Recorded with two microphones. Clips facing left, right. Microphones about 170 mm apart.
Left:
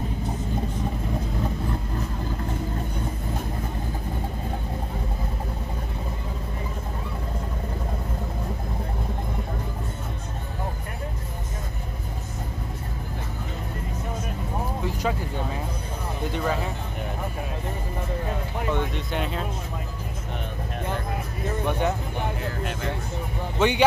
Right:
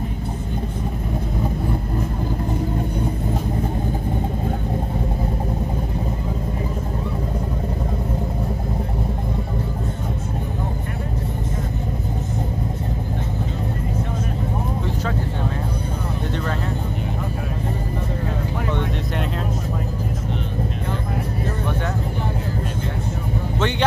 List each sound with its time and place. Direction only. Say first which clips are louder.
18.7 s vehicle: left 1 dB; centre (ahead or behind)
23.6 s music: left 2 dB; 10° left (ahead or behind)